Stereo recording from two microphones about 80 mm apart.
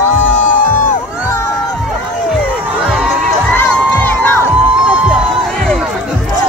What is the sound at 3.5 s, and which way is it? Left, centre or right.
Crowd, left.